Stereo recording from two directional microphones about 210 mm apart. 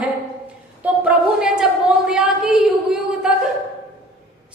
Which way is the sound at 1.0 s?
5° right (ahead or behind).